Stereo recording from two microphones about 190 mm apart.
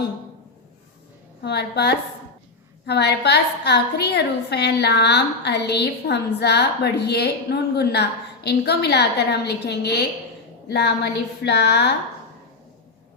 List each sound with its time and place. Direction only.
1.4 s a woman's voice: 60° left (ahead or behind)